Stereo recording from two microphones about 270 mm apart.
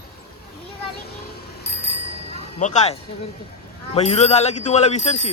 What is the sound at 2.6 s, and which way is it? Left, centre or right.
Speech, left.